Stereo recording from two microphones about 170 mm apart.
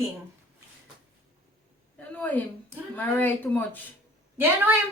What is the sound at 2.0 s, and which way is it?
A woman's voice, 10° left (ahead or behind).